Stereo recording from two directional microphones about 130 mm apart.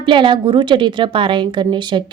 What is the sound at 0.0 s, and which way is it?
A woman's voice, 40° right (ahead or behind).